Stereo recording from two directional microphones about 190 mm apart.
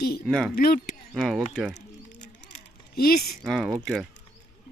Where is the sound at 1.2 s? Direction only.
Centre (ahead or behind).